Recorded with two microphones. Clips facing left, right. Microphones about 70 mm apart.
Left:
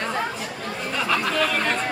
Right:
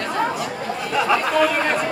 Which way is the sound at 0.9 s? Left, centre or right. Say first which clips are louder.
Right 5 dB; centre.